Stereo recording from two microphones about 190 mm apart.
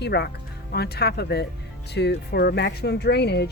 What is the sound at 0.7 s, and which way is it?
Speech, 55° left (ahead or behind).